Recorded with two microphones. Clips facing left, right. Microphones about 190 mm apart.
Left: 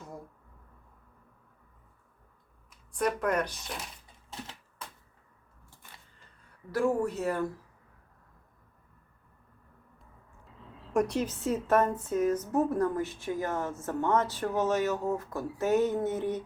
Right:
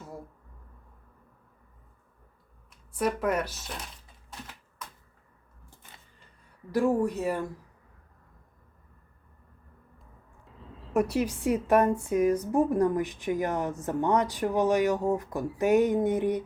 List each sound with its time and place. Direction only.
2.9 s speech: 5° right (ahead or behind)
4.3 s typewriter: 25° left (ahead or behind)
6.7 s a woman's voice: 15° right (ahead or behind)
10.9 s a woman's voice: 5° right (ahead or behind)